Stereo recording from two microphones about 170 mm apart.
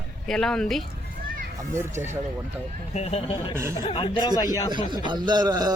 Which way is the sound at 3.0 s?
35° left (ahead or behind).